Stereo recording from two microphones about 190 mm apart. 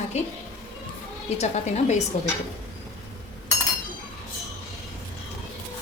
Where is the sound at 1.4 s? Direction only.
35° left (ahead or behind).